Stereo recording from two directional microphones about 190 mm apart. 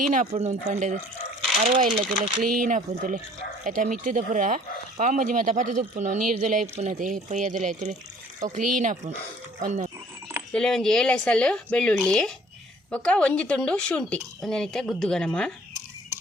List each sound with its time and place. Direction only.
0.0 s speech: 40° right (ahead or behind)
2.0 s speech: 30° right (ahead or behind)
2.4 s speech: 45° right (ahead or behind)
10.5 s speech: 5° left (ahead or behind)